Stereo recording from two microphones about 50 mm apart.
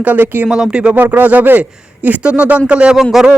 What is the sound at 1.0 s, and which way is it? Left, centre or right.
Speech, right.